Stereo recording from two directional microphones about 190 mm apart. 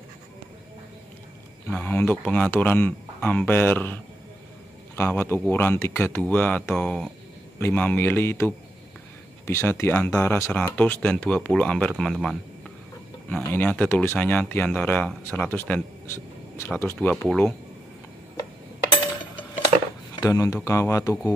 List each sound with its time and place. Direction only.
1.7 s speech: 10° left (ahead or behind)
20.2 s speech: 20° left (ahead or behind)